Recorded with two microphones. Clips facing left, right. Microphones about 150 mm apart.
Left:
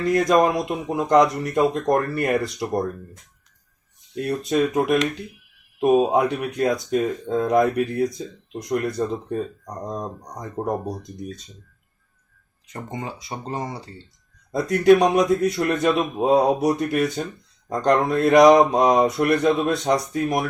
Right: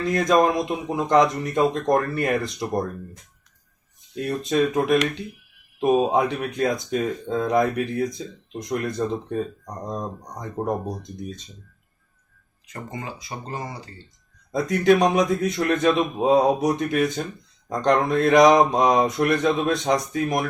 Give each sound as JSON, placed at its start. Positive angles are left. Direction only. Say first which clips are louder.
{"t": 0.0, "sound": "speech", "louder": "left 1 dB", "side_deg": 10}
{"t": 4.2, "sound": "speech", "louder": "left 1 dB", "side_deg": 5}
{"t": 12.7, "sound": "speech", "louder": "left 2 dB", "side_deg": 25}
{"t": 14.5, "sound": "speech", "louder": "left 3 dB", "side_deg": 5}